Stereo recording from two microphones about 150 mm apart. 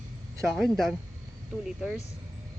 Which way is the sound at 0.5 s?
Centre (ahead or behind).